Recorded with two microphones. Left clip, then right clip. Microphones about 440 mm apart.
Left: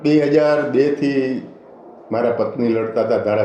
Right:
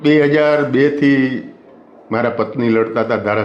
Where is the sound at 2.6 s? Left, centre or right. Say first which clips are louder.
Right 3 dB; right.